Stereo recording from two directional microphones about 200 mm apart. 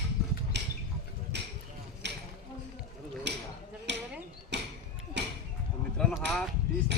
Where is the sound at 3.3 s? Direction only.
60° right (ahead or behind).